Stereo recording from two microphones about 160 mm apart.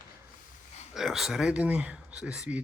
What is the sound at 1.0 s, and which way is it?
Speech, centre (ahead or behind).